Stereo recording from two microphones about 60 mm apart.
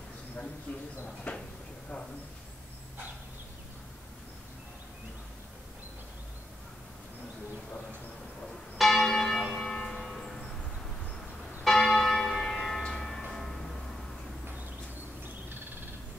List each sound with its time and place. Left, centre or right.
0.7 s speech: left
8.7 s church bell: centre
11.6 s church bell: centre
13.2 s music: centre